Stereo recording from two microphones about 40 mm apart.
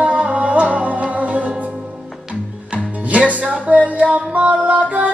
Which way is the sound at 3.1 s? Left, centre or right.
Right.